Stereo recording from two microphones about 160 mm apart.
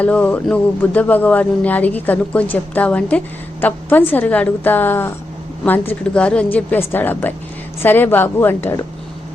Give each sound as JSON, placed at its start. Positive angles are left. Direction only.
{"t": 0.0, "sound": "speech", "side_deg": 10}